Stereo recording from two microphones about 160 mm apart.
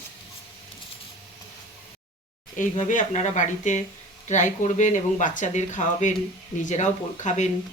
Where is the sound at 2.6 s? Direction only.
55° left (ahead or behind).